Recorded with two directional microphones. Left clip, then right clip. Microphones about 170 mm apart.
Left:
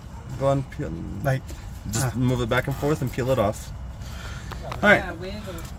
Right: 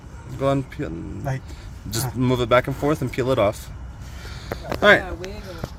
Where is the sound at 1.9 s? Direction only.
5° right (ahead or behind).